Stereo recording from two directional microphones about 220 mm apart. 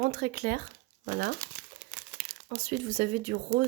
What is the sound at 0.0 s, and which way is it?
Speech, 45° right (ahead or behind).